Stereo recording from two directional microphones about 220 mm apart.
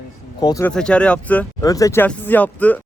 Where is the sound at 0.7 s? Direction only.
5° left (ahead or behind).